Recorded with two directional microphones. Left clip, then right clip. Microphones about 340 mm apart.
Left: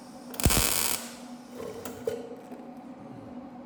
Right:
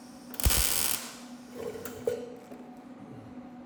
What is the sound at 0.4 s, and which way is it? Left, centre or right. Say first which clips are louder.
Ratchet: left 3 dB; centre.